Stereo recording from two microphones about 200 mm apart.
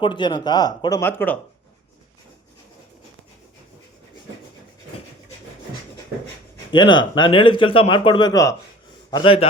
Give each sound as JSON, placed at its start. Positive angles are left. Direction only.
{"t": 0.0, "sound": "a man's voice", "side_deg": 25}
{"t": 6.7, "sound": "a man's voice", "side_deg": 25}